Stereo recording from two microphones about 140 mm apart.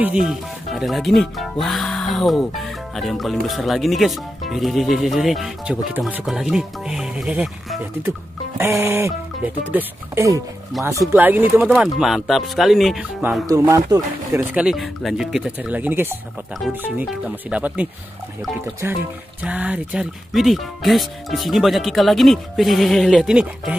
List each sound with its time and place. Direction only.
0.0 s speech: 5° right (ahead or behind)
10.8 s speech: 20° right (ahead or behind); by 13.0 s centre (ahead or behind)
13.5 s speech: 25° right (ahead or behind)
14.5 s speech: 5° right (ahead or behind)